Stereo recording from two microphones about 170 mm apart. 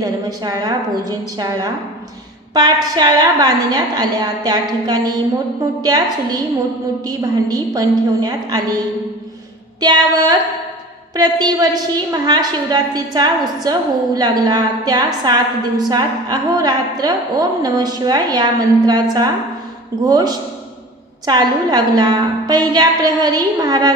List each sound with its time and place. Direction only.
0.0 s a woman's voice: 25° right (ahead or behind)
20.1 s a woman's voice: 25° right (ahead or behind)